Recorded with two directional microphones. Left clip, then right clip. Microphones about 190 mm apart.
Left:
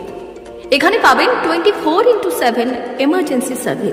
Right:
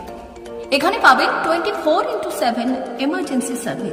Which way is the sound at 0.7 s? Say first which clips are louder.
Left 3 dB; 10° left (ahead or behind).